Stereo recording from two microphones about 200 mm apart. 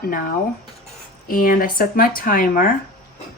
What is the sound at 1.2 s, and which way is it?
A woman's voice, 45° left (ahead or behind).